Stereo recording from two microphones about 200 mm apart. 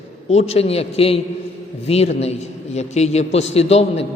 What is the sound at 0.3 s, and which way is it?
A man's voice, 30° left (ahead or behind).